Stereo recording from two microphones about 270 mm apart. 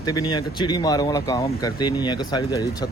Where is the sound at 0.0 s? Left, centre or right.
Centre.